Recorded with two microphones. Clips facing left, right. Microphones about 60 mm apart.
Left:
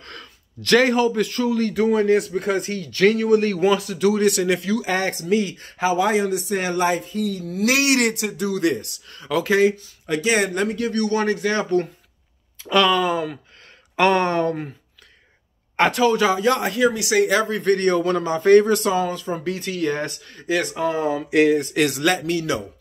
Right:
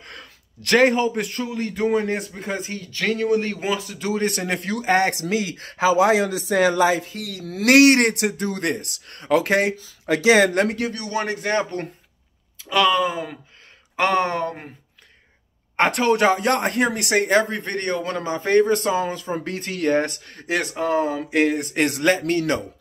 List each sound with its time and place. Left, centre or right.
0.0 s a sound: right
0.6 s speech: right
2.3 s speech: centre
4.0 s speech: right
4.3 s speech: right
4.6 s speech: right
5.2 s speech: right
11.1 s speech: right
12.6 s speech: centre
15.9 s speech: right
17.6 s speech: right
18.7 s speech: right
19.4 s speech: right
22.2 s speech: right